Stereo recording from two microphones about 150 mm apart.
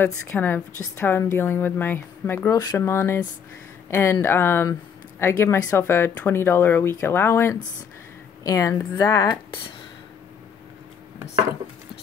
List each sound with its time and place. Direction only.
0.0 s a woman's voice: 15° left (ahead or behind)
2.5 s a woman's voice: 25° left (ahead or behind)